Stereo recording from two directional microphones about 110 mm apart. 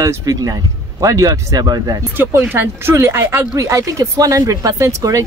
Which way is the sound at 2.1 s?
20° right (ahead or behind).